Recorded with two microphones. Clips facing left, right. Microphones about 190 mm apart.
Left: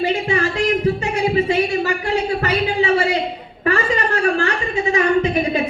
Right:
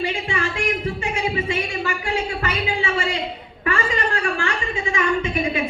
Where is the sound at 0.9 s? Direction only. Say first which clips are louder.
Left 6 dB; 40° left (ahead or behind).